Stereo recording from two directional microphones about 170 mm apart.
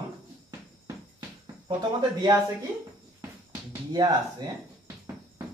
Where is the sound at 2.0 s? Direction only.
25° right (ahead or behind).